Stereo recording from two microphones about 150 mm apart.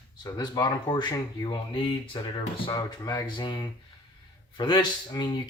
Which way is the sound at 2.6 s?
25° left (ahead or behind).